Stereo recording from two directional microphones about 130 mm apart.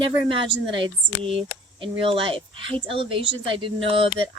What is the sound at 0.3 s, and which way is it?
Speech, 40° right (ahead or behind).